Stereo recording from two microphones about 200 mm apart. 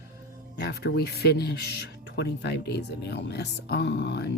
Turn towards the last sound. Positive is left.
turn(degrees=60)  # may be behind; listen again after turning